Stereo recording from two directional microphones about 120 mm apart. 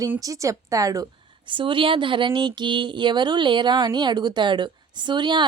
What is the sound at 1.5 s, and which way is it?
Speech, 45° right (ahead or behind).